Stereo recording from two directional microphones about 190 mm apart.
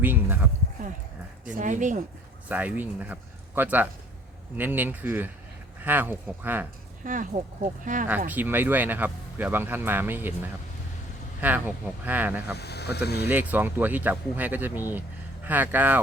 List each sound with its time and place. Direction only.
0.0 s speech: 10° right (ahead or behind)
1.5 s speech: 40° right (ahead or behind)
2.5 s speech: 10° right (ahead or behind)
7.0 s speech: 45° right (ahead or behind)
8.3 s speech: 10° right (ahead or behind)
12.5 s speech: 60° left (ahead or behind)
13.2 s speech: 10° right (ahead or behind)